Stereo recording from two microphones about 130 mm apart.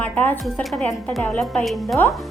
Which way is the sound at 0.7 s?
Centre (ahead or behind).